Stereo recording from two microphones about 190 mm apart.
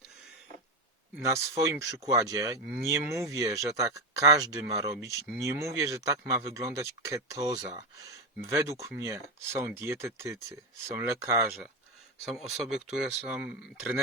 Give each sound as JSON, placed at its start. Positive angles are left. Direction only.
{"t": 1.2, "sound": "speech", "side_deg": -15}
{"t": 12.2, "sound": "speech", "side_deg": 0}